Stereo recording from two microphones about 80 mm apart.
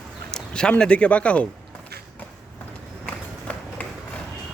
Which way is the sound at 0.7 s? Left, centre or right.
Centre.